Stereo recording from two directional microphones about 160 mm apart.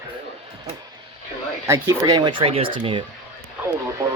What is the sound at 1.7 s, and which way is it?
Speech, 20° right (ahead or behind).